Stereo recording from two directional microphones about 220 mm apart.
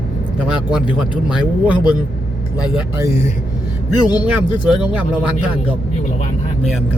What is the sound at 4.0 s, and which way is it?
Speech, 20° left (ahead or behind).